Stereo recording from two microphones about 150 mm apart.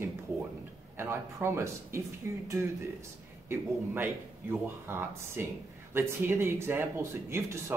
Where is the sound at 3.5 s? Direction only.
15° right (ahead or behind).